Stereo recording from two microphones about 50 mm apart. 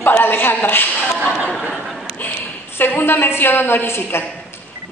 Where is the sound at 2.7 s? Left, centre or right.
Left.